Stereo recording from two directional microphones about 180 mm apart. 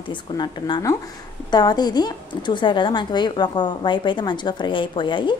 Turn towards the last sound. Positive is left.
turn(degrees=25)  # may be behind; listen again after turning